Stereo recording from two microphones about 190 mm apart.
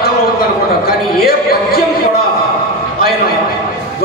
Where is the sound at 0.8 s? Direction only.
50° left (ahead or behind).